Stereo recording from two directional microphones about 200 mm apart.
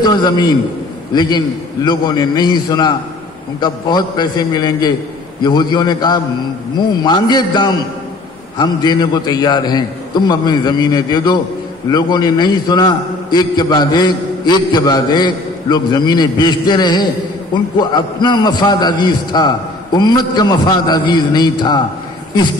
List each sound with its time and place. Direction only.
0.0 s a man's voice: 20° left (ahead or behind)